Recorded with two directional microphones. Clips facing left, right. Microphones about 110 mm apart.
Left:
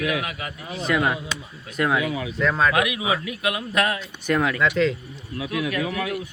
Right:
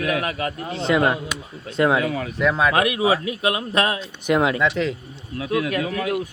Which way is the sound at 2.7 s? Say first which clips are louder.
Right 4 dB; 35° right (ahead or behind).